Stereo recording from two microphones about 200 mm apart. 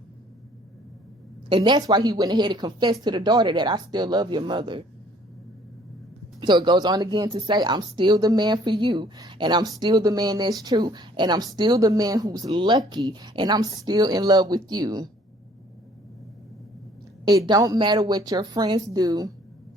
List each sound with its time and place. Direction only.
1.5 s speech: 25° right (ahead or behind)
6.4 s speech: 25° right (ahead or behind)
17.2 s speech: 20° right (ahead or behind)